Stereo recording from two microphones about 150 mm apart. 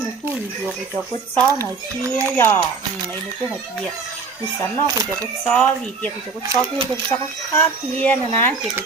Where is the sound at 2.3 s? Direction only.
15° left (ahead or behind).